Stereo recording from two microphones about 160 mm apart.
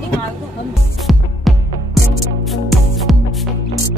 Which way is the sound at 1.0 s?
Centre (ahead or behind).